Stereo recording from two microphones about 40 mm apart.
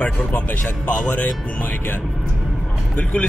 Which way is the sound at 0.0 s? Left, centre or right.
Left.